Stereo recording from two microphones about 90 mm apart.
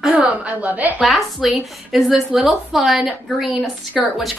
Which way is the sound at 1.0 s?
Centre (ahead or behind).